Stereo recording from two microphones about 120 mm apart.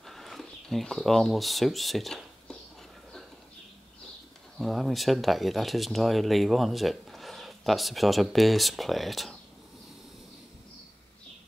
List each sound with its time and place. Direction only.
0.0 s speech: centre (ahead or behind)
4.6 s speech: centre (ahead or behind)